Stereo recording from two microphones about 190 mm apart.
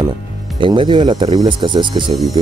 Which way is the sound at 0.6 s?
25° right (ahead or behind).